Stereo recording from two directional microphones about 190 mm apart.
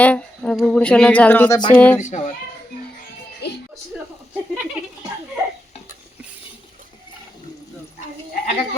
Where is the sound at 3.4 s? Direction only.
60° left (ahead or behind).